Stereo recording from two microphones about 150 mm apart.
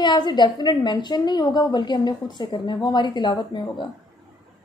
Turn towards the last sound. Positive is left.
turn(degrees=30)  # may be behind; listen again after turning